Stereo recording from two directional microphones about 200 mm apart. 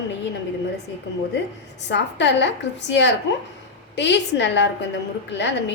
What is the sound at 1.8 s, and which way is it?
A woman's voice, 60° left (ahead or behind).